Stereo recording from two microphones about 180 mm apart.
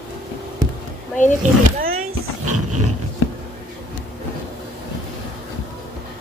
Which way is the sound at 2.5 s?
40° right (ahead or behind).